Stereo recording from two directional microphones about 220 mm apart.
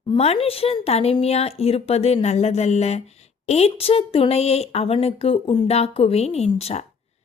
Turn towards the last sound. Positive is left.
turn(degrees=30)  # may be behind; listen again after turning